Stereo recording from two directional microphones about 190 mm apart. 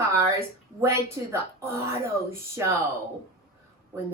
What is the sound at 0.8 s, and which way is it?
Speech, 15° right (ahead or behind).